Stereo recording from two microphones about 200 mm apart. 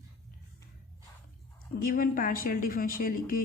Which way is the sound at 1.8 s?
45° left (ahead or behind).